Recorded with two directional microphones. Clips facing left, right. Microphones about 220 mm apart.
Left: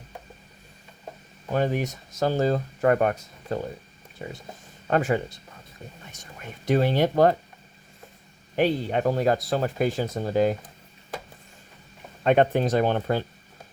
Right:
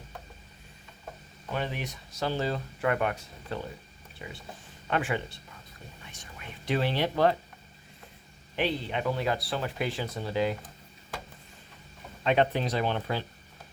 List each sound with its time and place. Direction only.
1.5 s speech: 45° left (ahead or behind)
8.5 s speech: 45° left (ahead or behind)
12.2 s speech: 50° left (ahead or behind)